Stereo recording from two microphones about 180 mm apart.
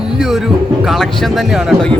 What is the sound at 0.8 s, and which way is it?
Speech, centre (ahead or behind).